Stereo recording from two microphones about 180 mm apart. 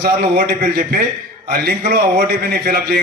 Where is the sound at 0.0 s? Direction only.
55° right (ahead or behind).